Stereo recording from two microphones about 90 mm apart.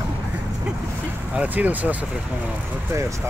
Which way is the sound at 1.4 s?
20° right (ahead or behind).